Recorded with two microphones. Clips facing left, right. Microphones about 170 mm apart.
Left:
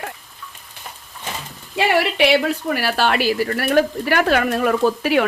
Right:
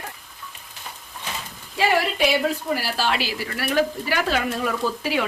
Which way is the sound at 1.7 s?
75° left (ahead or behind).